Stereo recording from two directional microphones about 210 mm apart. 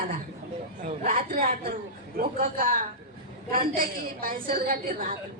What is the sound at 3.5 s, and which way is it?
A woman's voice, 45° right (ahead or behind).